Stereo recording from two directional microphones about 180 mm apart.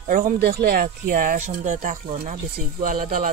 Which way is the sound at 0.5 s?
60° right (ahead or behind).